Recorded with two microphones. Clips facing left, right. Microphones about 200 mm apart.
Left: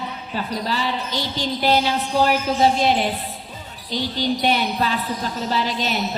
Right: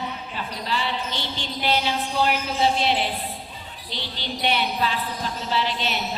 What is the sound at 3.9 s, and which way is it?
A woman's voice, 40° left (ahead or behind).